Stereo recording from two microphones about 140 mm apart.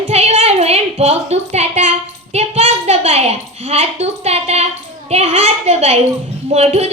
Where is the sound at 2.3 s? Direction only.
50° right (ahead or behind).